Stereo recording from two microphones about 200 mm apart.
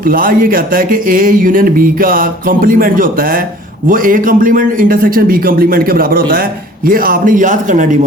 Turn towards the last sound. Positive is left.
turn(degrees=-40)  # may be behind; listen again after turning